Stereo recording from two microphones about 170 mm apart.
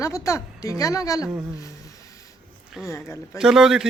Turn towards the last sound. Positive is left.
turn(degrees=-5)  # may be behind; listen again after turning